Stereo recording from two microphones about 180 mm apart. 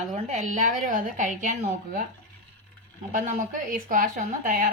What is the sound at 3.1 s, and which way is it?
A woman's voice, 45° right (ahead or behind).